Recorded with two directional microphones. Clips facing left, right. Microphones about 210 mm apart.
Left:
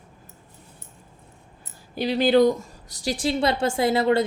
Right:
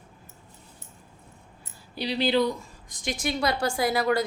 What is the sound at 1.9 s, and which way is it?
A woman's voice, 50° left (ahead or behind).